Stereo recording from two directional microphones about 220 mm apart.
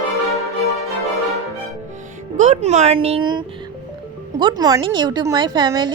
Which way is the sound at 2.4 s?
30° right (ahead or behind).